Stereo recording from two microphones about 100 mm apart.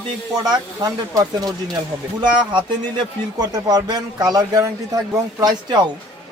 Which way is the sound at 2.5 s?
50° right (ahead or behind).